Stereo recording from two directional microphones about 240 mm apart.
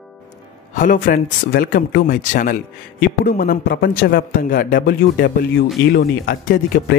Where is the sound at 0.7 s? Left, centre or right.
Left.